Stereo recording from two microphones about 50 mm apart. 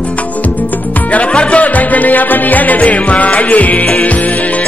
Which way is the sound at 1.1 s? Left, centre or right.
Left.